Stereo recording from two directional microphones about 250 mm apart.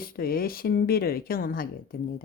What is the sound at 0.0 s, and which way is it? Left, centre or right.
Speech, left.